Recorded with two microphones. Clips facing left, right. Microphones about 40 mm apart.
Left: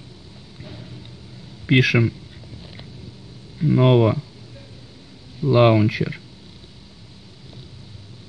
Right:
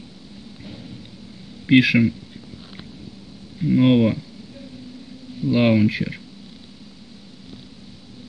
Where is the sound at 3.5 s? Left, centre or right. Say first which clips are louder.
Even; centre.